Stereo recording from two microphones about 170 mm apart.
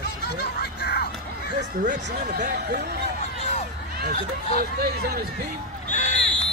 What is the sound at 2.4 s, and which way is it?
Speech, 70° right (ahead or behind).